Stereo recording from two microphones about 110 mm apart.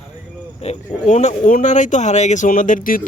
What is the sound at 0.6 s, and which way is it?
Speech, 85° left.